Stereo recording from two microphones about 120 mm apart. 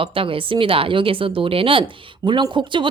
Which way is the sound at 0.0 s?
50° right (ahead or behind).